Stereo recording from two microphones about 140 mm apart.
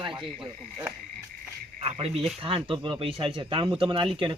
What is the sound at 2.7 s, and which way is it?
A woman's voice, 35° right (ahead or behind).